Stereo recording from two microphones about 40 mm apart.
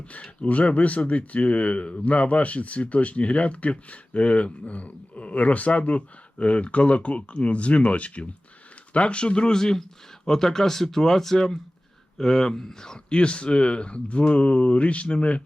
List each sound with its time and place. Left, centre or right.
0.1 s speech: left